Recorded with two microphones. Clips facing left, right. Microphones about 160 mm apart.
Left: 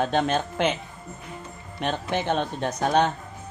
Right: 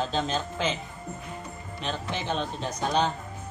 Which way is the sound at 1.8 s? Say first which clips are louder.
Left 6 dB; 60° left (ahead or behind).